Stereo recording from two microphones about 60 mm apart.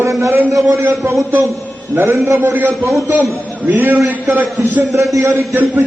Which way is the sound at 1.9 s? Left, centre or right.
Right.